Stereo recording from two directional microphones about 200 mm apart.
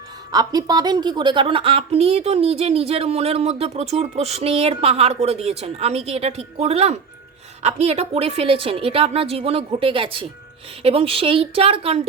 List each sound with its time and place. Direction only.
0.3 s a woman's voice: 20° right (ahead or behind)